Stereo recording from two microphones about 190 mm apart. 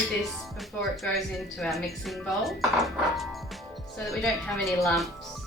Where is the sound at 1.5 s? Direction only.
Centre (ahead or behind).